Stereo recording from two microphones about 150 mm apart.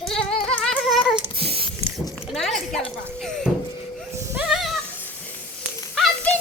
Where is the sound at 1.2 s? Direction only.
40° right (ahead or behind).